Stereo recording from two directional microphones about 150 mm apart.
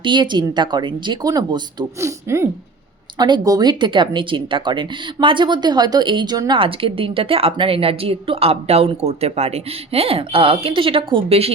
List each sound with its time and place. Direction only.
0.0 s speech: 30° right (ahead or behind)
3.2 s speech: 30° right (ahead or behind)